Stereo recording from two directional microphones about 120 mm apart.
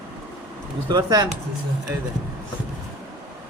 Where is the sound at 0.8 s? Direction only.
35° right (ahead or behind).